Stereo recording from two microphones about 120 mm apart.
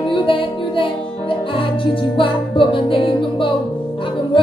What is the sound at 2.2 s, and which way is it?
Music, 45° left (ahead or behind).